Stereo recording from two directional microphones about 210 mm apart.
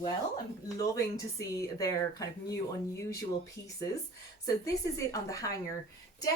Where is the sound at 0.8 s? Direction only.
15° left (ahead or behind).